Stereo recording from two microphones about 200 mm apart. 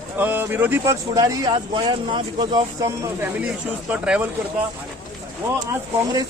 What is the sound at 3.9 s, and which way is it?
Speech, 5° right (ahead or behind).